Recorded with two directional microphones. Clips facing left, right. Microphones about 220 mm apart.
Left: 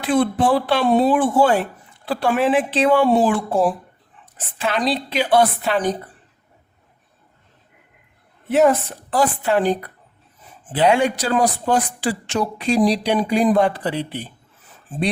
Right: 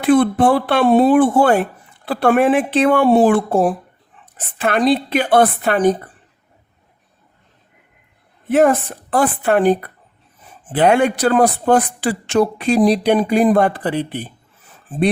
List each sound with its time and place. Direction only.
0.0 s a woman's voice: 55° right (ahead or behind)
8.4 s speech: 50° right (ahead or behind)